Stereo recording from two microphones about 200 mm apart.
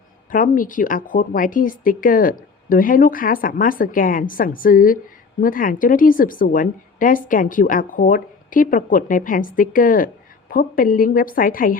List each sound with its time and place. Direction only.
0.3 s speech: 45° left (ahead or behind)